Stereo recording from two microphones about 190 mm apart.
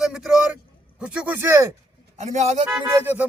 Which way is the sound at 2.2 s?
35° right (ahead or behind).